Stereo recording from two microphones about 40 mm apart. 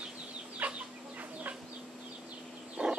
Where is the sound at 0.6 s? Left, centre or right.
Right.